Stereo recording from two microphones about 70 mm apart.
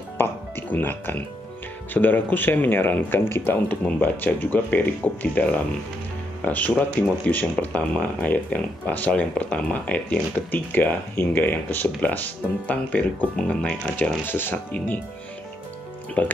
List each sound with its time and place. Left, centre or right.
0.2 s speech: left
14.2 s speech: left
16.2 s speech: left